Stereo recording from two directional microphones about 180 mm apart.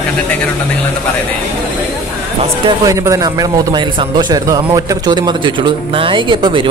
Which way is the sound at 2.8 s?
20° right (ahead or behind).